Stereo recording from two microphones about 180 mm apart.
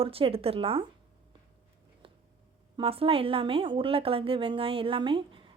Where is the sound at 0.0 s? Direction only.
30° right (ahead or behind).